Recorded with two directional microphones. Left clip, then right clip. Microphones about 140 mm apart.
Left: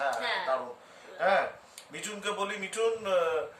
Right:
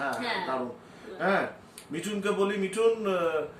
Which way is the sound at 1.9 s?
25° left (ahead or behind).